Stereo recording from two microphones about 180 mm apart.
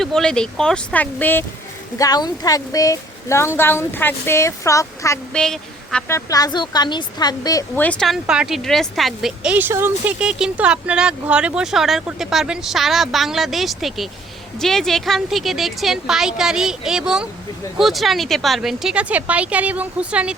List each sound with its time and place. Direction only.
0.0 s speech: 5° left (ahead or behind)
2.0 s a woman's voice: 20° left (ahead or behind)
5.3 s a woman's voice: 5° left (ahead or behind)
6.1 s a woman's voice: 20° left (ahead or behind)
7.8 s speech: 5° left (ahead or behind)